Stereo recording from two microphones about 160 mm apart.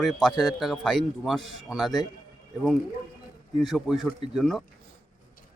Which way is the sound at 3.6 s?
Centre (ahead or behind).